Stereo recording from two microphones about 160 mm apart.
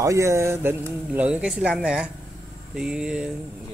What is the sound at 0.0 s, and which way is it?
Speech, 20° right (ahead or behind).